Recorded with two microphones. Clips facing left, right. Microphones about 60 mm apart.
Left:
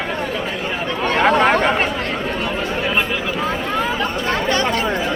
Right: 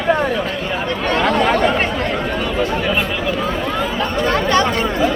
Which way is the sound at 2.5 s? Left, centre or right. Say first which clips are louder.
Right 3 dB; left.